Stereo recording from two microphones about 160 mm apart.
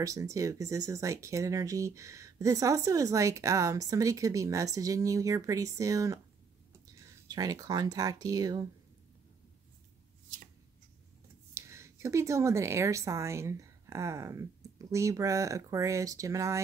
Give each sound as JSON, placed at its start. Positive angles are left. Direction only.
{"t": 0.0, "sound": "speech", "side_deg": -20}
{"t": 7.2, "sound": "speech", "side_deg": -25}
{"t": 11.5, "sound": "speech", "side_deg": -15}